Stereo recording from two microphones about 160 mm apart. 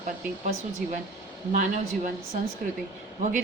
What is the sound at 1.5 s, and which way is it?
Speech, 50° right (ahead or behind).